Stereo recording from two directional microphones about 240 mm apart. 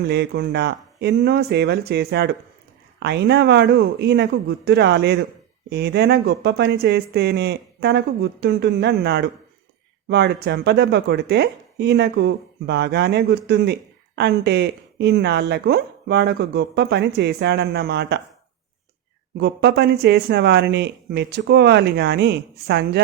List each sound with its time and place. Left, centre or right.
0.1 s speech: right
19.4 s speech: right